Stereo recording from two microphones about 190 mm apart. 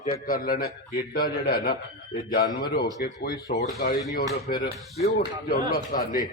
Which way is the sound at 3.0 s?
55° left (ahead or behind).